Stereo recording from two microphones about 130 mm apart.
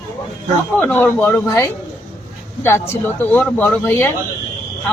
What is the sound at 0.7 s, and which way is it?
Speech, 15° left (ahead or behind).